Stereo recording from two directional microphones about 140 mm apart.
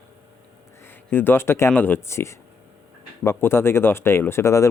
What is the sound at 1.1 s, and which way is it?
Speech, 15° left (ahead or behind).